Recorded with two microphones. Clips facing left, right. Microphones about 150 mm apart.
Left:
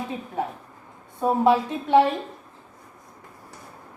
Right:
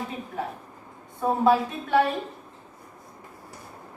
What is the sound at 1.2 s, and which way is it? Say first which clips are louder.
Speech: left 2 dB; 20° left (ahead or behind).